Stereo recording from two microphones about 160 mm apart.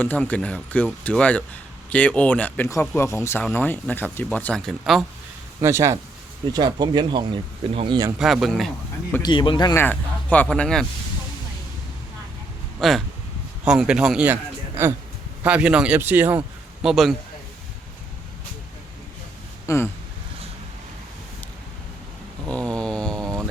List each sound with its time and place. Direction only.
0.0 s speech: 10° left (ahead or behind)
5.5 s speech: 20° right (ahead or behind); by 7.9 s 35° right (ahead or behind)
8.2 s speech: centre (ahead or behind)
9.2 s speech: 30° left (ahead or behind)
9.7 s speech: 10° left (ahead or behind)
12.8 s speech: centre (ahead or behind)
15.4 s speech: 10° right (ahead or behind)
19.6 s a sound: 15° left (ahead or behind)
22.4 s a sound: 5° left (ahead or behind)